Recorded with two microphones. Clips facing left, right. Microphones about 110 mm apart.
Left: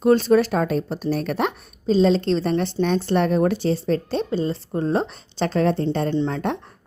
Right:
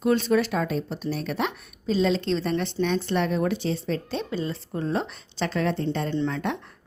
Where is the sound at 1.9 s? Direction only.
35° left (ahead or behind).